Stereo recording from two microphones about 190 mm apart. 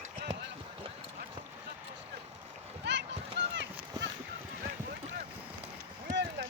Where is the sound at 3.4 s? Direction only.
65° right (ahead or behind).